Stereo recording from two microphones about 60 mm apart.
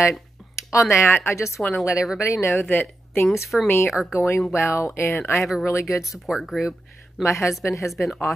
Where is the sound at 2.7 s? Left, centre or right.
Left.